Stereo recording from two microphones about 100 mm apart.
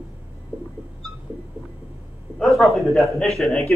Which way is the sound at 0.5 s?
20° right (ahead or behind).